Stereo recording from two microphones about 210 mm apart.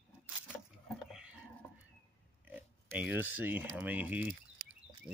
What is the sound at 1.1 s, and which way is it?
Patter, 5° right (ahead or behind).